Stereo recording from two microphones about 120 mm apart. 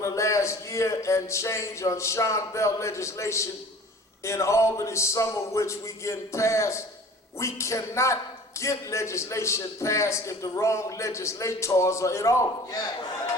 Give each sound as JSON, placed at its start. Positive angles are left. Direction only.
{"t": 0.0, "sound": "a man's voice", "side_deg": 25}